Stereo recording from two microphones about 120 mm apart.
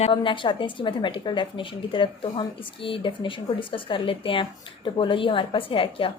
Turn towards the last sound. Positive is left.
turn(degrees=45)  # may be behind; listen again after turning